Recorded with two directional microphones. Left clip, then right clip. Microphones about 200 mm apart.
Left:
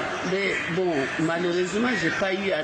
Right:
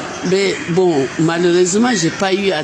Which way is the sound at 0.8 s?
50° right (ahead or behind).